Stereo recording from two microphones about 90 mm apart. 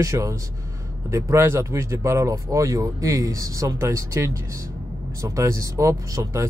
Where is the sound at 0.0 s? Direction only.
35° right (ahead or behind).